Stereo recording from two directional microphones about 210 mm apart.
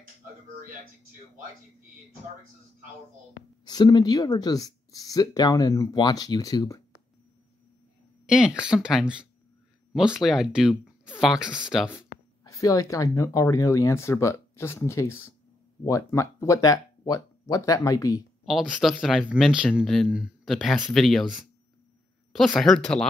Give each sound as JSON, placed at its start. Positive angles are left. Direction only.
{"t": 3.6, "sound": "speech", "side_deg": 20}
{"t": 8.3, "sound": "speech", "side_deg": -5}
{"t": 12.4, "sound": "speech", "side_deg": 15}
{"t": 18.4, "sound": "speech", "side_deg": 0}